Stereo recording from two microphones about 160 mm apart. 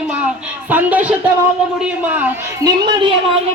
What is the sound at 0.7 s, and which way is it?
Speech, 10° right (ahead or behind).